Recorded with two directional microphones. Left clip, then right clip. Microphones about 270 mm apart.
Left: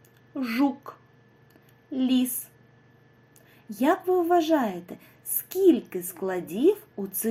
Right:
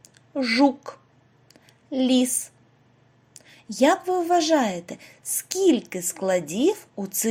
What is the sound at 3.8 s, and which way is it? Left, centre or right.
A woman's voice, centre.